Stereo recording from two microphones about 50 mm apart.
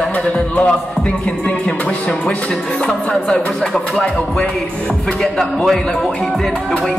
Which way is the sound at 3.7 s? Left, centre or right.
Centre.